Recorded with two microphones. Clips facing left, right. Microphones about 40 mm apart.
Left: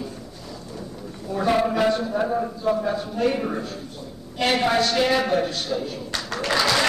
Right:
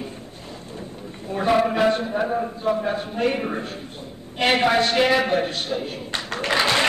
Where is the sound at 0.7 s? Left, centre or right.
Right.